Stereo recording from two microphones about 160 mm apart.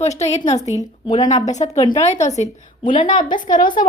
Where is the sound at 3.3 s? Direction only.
55° left (ahead or behind).